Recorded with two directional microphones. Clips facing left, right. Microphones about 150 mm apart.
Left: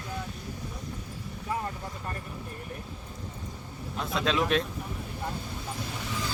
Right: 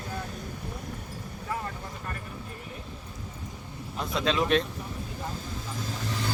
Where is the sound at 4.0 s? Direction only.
Centre (ahead or behind).